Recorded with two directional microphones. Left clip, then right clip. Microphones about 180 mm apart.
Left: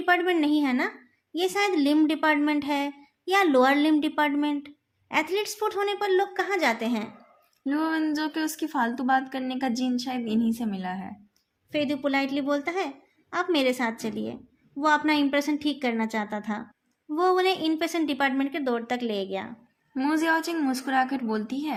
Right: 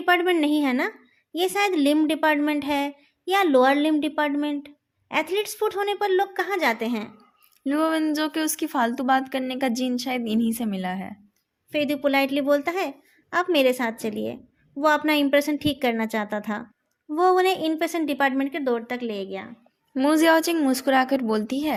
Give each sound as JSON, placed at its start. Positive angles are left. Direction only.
{"t": 0.0, "sound": "a woman's voice", "side_deg": -30}
{"t": 7.6, "sound": "a woman's voice", "side_deg": -45}
{"t": 11.7, "sound": "a woman's voice", "side_deg": -25}
{"t": 19.9, "sound": "a woman's voice", "side_deg": -40}